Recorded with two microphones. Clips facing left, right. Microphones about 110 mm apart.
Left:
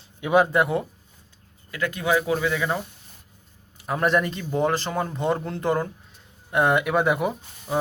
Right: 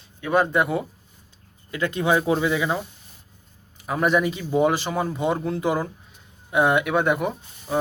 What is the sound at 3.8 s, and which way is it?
Speech, centre (ahead or behind).